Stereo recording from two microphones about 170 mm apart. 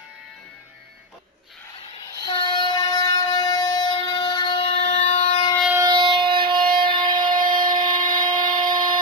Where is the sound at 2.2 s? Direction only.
25° left (ahead or behind).